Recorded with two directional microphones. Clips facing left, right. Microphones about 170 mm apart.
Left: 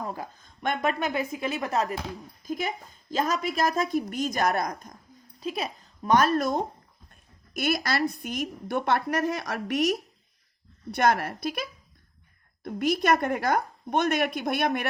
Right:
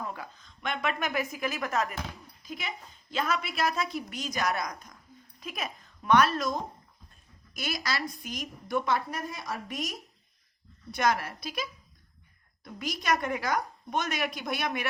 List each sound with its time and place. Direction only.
0.0 s speech: 40° left (ahead or behind)
0.9 s speech: 30° left (ahead or behind)
2.4 s a woman's voice: 45° left (ahead or behind)
5.4 s a woman's voice: 30° left (ahead or behind); by 10.0 s 75° left (ahead or behind)
10.9 s a woman's voice: 60° left (ahead or behind)